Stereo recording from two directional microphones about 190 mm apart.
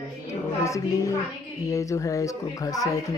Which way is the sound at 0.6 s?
15° left (ahead or behind).